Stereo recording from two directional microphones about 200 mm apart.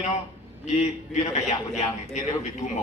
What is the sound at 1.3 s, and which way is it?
A man's voice, 35° left (ahead or behind).